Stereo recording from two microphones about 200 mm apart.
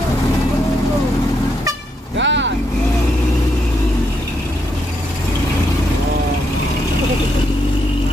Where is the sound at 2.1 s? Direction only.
65° right (ahead or behind).